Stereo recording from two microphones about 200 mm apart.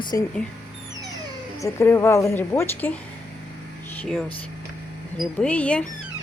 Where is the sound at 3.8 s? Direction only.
10° left (ahead or behind).